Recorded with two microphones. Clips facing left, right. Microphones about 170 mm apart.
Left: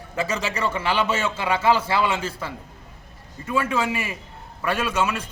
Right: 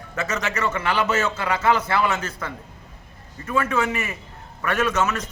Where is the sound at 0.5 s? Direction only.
10° left (ahead or behind).